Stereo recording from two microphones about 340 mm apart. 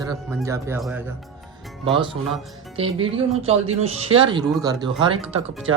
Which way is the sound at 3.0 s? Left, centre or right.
Centre.